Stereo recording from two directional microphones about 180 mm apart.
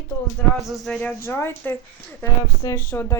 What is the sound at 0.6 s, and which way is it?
Speech, centre (ahead or behind).